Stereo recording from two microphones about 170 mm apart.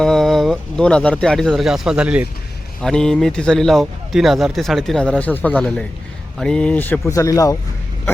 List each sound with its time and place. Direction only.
0.0 s speech: centre (ahead or behind)
2.8 s a man's voice: 5° left (ahead or behind); by 7.5 s 20° left (ahead or behind)